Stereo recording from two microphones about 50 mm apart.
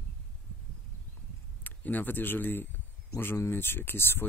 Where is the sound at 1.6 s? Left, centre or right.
Left.